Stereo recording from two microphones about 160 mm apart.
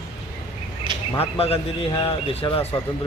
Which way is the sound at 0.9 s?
30° right (ahead or behind).